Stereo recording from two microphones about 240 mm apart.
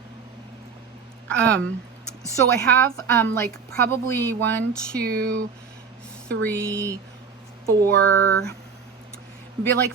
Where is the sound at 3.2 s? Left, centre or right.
Centre.